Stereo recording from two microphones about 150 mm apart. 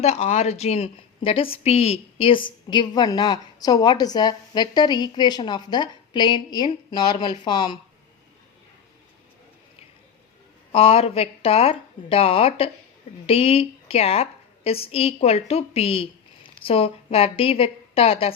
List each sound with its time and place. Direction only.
0.0 s a woman's voice: 45° left (ahead or behind)
2.6 s a woman's voice: 30° left (ahead or behind)
10.7 s a woman's voice: 40° left (ahead or behind)